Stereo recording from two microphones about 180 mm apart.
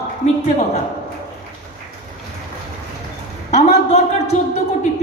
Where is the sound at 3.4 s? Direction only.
40° left (ahead or behind).